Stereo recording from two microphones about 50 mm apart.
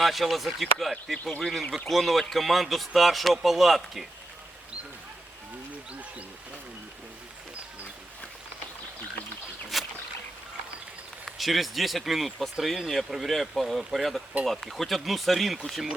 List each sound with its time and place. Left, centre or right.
0.0 s speech: centre
5.9 s speech: right
9.7 s rowboat: centre
11.3 s speech: centre